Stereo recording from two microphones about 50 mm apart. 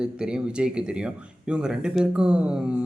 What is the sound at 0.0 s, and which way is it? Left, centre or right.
Speech, centre.